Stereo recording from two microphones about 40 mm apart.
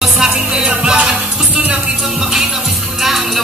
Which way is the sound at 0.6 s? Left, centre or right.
Right.